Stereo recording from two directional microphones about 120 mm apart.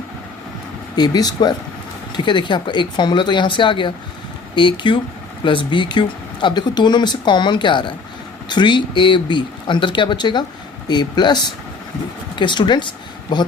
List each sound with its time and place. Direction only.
0.9 s speech: 35° left (ahead or behind)
12.4 s speech: 40° left (ahead or behind)